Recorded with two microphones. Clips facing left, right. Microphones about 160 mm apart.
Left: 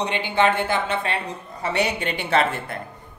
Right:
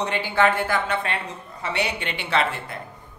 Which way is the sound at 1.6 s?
40° left (ahead or behind).